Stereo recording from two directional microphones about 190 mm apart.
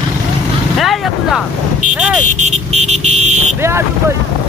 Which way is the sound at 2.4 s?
35° right (ahead or behind).